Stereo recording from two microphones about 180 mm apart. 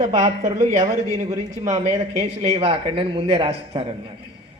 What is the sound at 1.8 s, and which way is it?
A man's voice, 35° right (ahead or behind).